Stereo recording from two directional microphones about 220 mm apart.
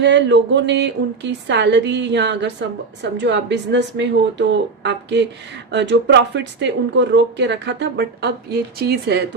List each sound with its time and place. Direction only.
0.0 s a woman's voice: 55° right (ahead or behind)